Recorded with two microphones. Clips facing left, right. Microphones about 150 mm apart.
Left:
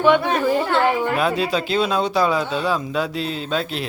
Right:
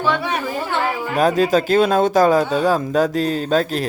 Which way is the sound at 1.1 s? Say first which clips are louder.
Right 5 dB; 40° right (ahead or behind).